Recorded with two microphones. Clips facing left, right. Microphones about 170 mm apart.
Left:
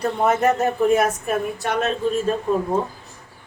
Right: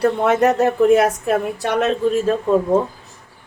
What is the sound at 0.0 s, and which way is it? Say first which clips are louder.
A woman's voice: right 4 dB; 75° right (ahead or behind).